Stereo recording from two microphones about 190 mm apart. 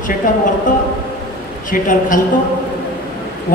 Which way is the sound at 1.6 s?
45° left (ahead or behind).